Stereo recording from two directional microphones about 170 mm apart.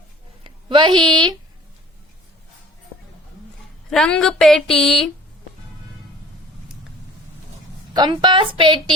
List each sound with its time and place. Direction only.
0.4 s a woman's voice: 30° right (ahead or behind)
3.8 s a woman's voice: 5° left (ahead or behind)
7.9 s a woman's voice: 25° right (ahead or behind)